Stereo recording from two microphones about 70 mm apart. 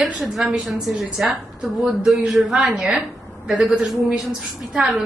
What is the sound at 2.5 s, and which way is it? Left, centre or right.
A woman's voice, centre.